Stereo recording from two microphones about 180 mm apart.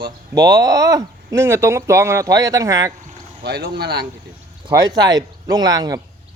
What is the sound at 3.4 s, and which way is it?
Speech, 65° right (ahead or behind).